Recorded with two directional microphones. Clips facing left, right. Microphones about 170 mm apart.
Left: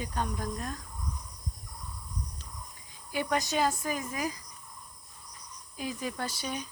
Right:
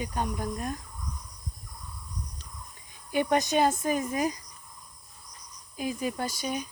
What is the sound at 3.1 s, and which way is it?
Speech, 20° right (ahead or behind).